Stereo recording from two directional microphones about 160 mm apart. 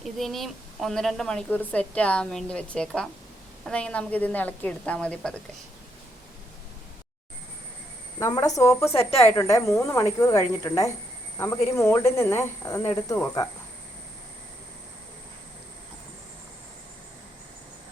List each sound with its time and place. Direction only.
0.0 s a woman's voice: centre (ahead or behind)
8.2 s speech: 20° left (ahead or behind)